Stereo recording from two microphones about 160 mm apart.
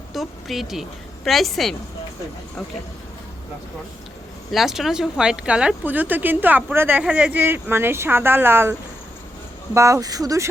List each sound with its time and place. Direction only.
0.1 s a woman's voice: centre (ahead or behind)
4.5 s speech: centre (ahead or behind)
9.7 s speech: 20° right (ahead or behind)